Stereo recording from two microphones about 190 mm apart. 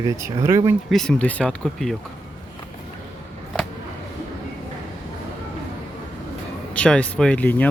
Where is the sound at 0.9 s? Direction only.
5° left (ahead or behind).